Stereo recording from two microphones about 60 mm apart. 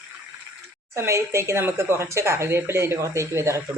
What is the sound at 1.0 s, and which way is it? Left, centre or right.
Speech, right.